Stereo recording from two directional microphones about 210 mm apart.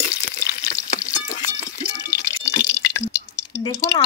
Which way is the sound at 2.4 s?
15° left (ahead or behind).